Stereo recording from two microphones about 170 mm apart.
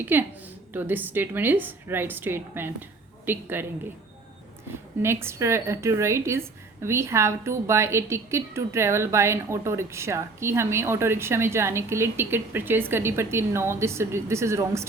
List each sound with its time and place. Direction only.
0.0 s a woman's voice: 10° right (ahead or behind)
5.0 s a woman's voice: 15° right (ahead or behind)